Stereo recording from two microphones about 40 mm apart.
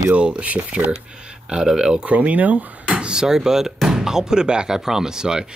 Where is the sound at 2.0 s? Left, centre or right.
Right.